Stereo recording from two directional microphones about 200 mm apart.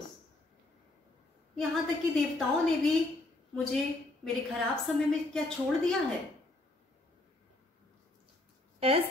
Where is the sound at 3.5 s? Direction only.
Centre (ahead or behind).